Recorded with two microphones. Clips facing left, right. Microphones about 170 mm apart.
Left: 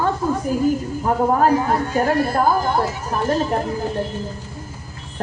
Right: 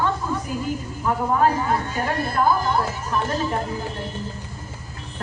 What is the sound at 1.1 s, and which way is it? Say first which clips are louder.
Speech: left 5 dB; 40° left (ahead or behind).